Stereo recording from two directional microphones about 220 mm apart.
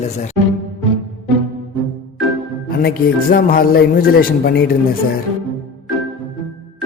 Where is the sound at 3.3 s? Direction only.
40° left (ahead or behind).